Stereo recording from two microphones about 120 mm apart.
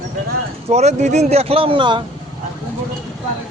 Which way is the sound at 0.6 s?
65° right (ahead or behind).